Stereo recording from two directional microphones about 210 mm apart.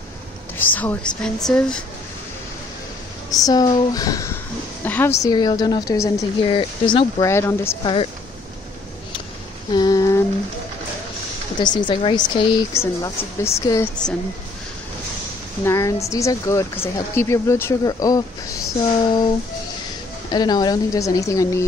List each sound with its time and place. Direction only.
0.6 s a woman's voice: 10° left (ahead or behind)
3.3 s a woman's voice: 15° left (ahead or behind)
5.2 s a woman's voice: 20° left (ahead or behind)
7.8 s speech: 25° left (ahead or behind)
9.7 s humming: 20° left (ahead or behind)
11.6 s a woman's voice: 20° left (ahead or behind)
15.6 s a woman's voice: 15° left (ahead or behind)
20.2 s a woman's voice: 20° left (ahead or behind)